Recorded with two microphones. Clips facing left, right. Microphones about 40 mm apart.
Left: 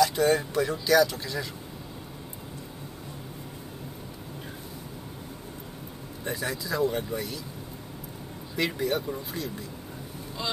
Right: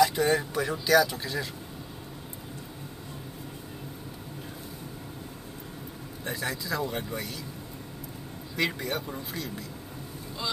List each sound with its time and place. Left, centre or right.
0.0 s a sound: centre
0.3 s speech: centre
6.2 s speech: centre
8.5 s speech: centre